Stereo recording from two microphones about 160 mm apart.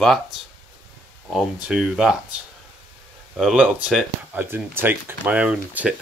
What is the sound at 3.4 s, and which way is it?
Speech, 5° right (ahead or behind).